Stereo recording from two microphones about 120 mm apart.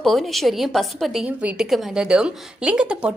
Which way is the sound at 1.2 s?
10° right (ahead or behind).